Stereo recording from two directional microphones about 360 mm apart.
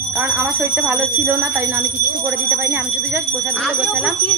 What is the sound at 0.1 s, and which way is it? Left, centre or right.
Bicycle bell, centre.